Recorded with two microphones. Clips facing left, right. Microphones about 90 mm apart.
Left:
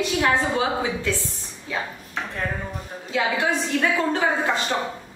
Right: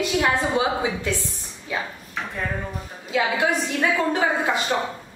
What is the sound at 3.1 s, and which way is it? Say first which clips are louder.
A woman's voice: right 1 dB; 15° right (ahead or behind).